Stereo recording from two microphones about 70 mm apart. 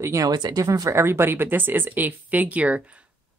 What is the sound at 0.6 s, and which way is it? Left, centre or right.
Speech, right.